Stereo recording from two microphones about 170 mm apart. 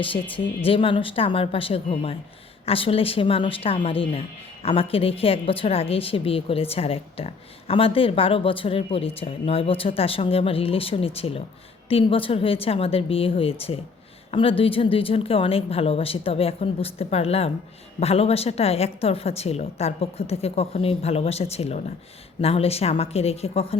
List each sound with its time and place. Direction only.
0.0 s a woman's voice: 30° left (ahead or behind)